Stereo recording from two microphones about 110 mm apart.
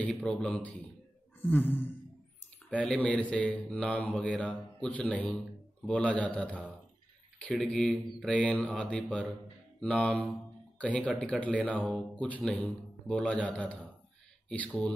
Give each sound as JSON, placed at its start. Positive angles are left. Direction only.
{"t": 0.0, "sound": "speech", "side_deg": 10}